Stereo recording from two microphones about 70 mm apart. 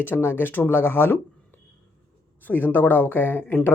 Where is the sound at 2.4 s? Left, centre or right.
Left.